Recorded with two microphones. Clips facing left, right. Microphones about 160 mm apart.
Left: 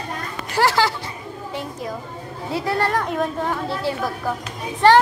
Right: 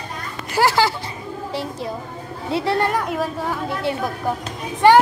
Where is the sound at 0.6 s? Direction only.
5° right (ahead or behind).